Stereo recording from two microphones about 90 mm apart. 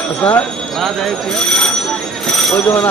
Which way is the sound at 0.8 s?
5° left (ahead or behind).